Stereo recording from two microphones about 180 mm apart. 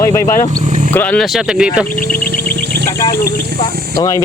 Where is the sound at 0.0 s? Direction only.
15° left (ahead or behind).